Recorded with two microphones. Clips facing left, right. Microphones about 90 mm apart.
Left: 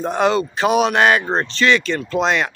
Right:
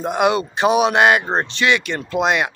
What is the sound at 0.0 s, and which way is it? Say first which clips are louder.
Speech: even; 10° right (ahead or behind).